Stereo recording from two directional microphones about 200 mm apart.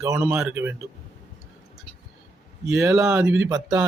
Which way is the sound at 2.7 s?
5° right (ahead or behind).